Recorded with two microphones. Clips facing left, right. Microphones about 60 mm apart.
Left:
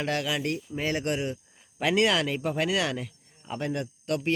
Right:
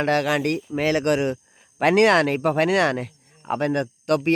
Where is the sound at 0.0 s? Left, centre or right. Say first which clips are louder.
Right 8 dB; right.